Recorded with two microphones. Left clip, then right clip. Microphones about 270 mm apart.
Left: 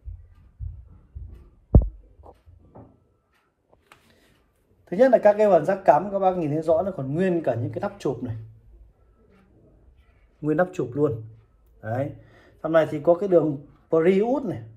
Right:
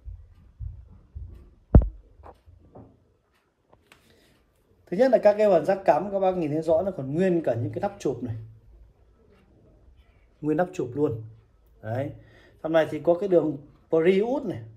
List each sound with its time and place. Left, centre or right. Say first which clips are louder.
1.7 s heart sounds: even; left
3.9 s a sound: left 3 dB; centre
4.8 s a man's voice: left 2 dB; centre
6.7 s speech: left 2 dB; centre
10.4 s speech: left 2 dB; centre
13.3 s speech: left 2 dB; centre
13.9 s a man's voice: left 2 dB; centre